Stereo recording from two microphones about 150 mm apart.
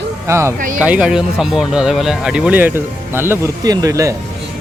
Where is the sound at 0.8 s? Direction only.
5° right (ahead or behind).